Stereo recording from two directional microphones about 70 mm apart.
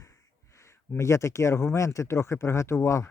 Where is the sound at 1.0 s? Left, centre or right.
Left.